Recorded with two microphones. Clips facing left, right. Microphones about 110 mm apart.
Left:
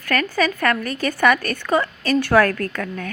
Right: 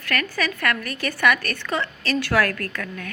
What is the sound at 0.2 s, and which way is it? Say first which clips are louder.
Speech: left 7 dB; 35° left (ahead or behind).